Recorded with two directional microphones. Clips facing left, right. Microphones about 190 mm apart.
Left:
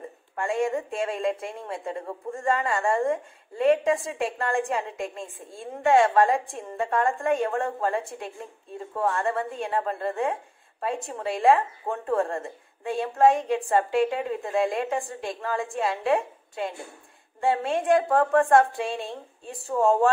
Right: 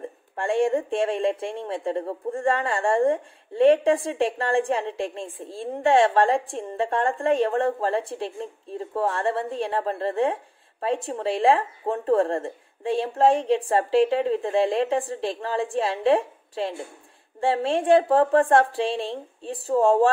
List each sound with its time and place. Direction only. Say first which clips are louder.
0.4 s speech: right 4 dB; 30° right (ahead or behind)